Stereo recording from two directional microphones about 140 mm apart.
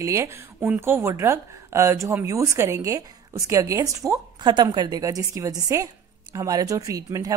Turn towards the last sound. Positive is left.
turn(degrees=-25)  # may be behind; listen again after turning